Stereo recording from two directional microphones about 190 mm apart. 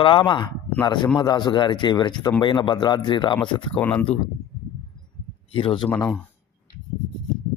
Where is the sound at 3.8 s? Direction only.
10° left (ahead or behind).